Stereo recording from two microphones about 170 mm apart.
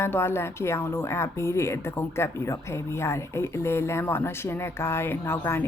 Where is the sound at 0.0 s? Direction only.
15° left (ahead or behind).